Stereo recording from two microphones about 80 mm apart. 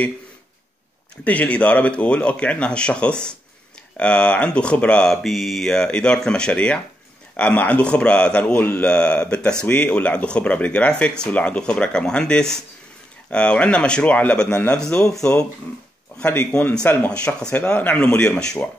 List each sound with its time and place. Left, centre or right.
1.2 s speech: centre
5.1 s speech: centre; by 14.8 s left
14.8 s speech: centre
16.5 s speech: centre